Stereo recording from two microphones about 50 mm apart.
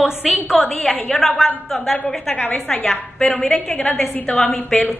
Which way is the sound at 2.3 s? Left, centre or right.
Left.